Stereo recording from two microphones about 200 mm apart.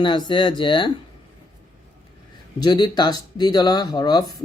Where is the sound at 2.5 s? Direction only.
20° left (ahead or behind).